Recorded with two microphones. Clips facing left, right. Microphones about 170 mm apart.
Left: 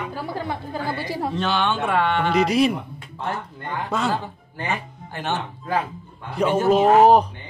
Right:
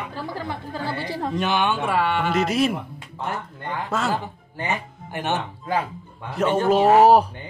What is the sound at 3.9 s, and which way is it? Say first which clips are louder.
Speech: left 1 dB; centre (ahead or behind).